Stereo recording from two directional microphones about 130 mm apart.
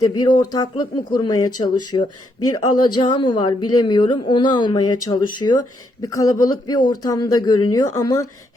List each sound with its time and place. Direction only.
0.0 s a woman's voice: 35° left (ahead or behind)